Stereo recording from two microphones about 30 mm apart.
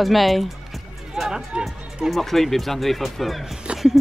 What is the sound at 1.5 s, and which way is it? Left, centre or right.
Speech, right.